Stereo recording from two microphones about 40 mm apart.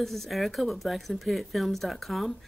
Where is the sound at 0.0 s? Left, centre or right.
Centre.